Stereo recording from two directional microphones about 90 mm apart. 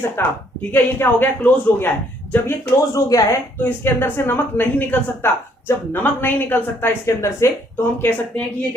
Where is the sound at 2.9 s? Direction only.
35° left (ahead or behind).